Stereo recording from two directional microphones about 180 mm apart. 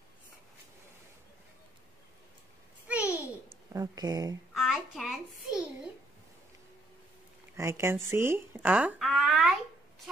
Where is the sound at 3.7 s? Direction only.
20° right (ahead or behind).